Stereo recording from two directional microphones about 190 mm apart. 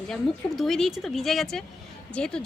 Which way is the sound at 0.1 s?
Centre (ahead or behind).